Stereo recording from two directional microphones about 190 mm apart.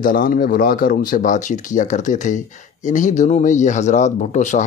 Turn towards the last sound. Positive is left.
turn(degrees=40)  # may be behind; listen again after turning